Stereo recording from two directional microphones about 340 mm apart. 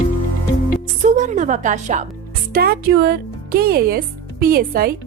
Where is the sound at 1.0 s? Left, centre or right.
Right.